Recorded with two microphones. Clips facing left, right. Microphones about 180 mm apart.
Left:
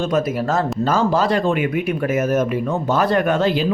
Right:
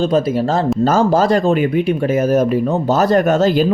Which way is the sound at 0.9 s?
45° right (ahead or behind).